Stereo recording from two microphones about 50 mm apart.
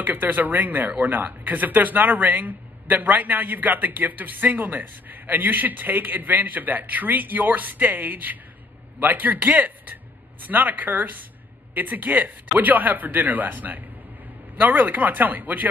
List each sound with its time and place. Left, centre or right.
0.0 s speech: right